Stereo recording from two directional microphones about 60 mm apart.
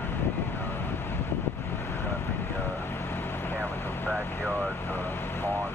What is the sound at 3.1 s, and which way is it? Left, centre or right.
Vehicle, left.